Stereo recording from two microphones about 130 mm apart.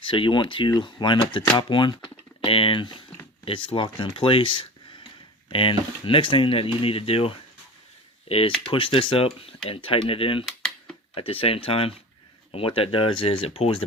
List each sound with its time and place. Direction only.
0.0 s speech: 40° left (ahead or behind)